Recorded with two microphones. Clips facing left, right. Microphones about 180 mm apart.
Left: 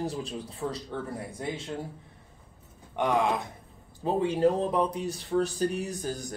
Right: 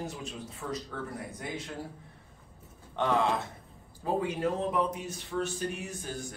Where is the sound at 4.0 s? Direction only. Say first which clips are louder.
Left 6 dB; 30° left (ahead or behind).